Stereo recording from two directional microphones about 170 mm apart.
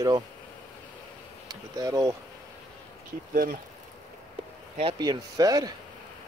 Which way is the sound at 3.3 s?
55° right (ahead or behind).